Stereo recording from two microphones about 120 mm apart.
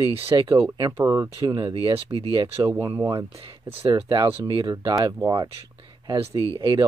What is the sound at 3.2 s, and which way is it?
Speech, 50° right (ahead or behind).